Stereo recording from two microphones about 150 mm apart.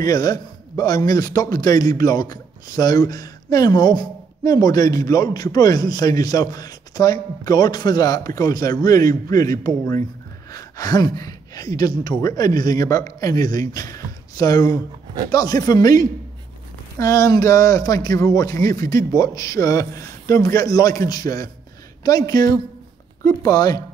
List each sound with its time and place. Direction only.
0.0 s a man's voice: 25° left (ahead or behind)